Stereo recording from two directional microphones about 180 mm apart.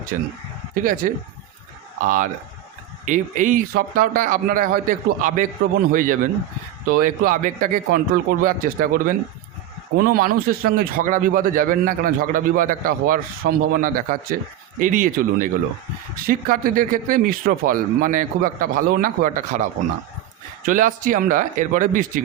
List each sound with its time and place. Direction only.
0.7 s a man's voice: 50° right (ahead or behind)
20.7 s a man's voice: 50° right (ahead or behind)